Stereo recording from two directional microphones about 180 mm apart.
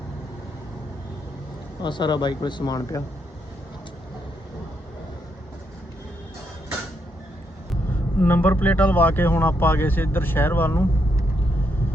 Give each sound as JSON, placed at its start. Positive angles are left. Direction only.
{"t": 1.8, "sound": "speech", "side_deg": 25}
{"t": 8.2, "sound": "speech", "side_deg": 10}